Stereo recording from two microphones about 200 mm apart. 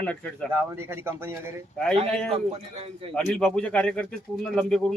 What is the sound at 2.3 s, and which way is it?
Speech, 30° right (ahead or behind).